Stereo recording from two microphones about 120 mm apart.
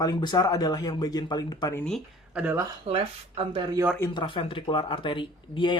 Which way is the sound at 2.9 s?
50° right (ahead or behind).